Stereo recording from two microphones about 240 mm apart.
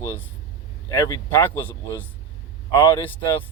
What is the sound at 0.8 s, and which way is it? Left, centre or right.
Speech, centre.